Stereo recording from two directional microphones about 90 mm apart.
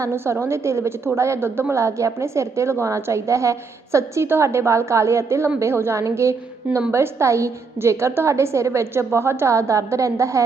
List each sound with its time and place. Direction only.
0.0 s a woman's voice: 30° right (ahead or behind)
6.7 s a woman's voice: 15° right (ahead or behind)
6.9 s a woman's voice: 30° right (ahead or behind)